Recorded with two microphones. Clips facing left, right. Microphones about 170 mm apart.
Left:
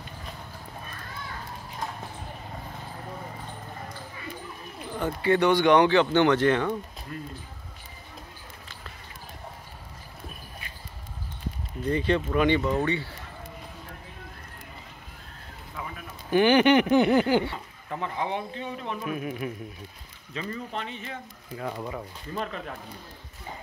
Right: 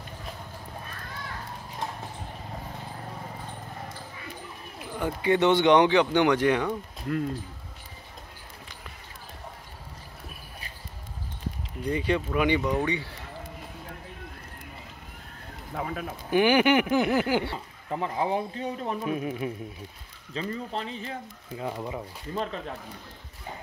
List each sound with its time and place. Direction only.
4.7 s speech: 10° right (ahead or behind)
7.1 s speech: 65° right (ahead or behind)
11.8 s speech: 10° right (ahead or behind)
15.7 s speech: 70° right (ahead or behind)
16.3 s speech: 10° right (ahead or behind)
16.9 s a sound: 5° right (ahead or behind)
17.8 s speech: 30° right (ahead or behind)
21.5 s speech: 15° right (ahead or behind)
22.3 s speech: 30° right (ahead or behind)